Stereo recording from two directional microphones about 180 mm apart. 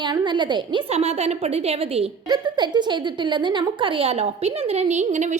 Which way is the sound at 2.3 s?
25° right (ahead or behind).